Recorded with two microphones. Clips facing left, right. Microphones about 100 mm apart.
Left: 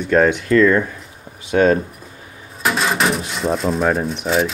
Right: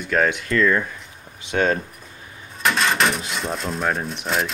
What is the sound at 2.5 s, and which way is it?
Speech, 5° left (ahead or behind).